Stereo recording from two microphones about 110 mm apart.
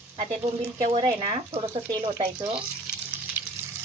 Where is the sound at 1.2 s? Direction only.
60° right (ahead or behind).